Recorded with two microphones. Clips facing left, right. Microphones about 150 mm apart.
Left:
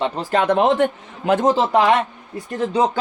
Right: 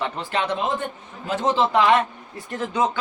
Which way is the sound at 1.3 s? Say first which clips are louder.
Left 5 dB; 45° left (ahead or behind).